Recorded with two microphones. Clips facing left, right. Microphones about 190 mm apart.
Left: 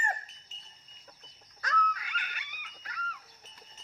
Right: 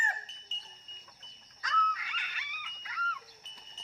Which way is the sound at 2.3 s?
45° left (ahead or behind).